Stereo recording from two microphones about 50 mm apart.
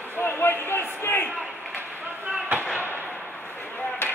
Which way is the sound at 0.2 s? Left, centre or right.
Left.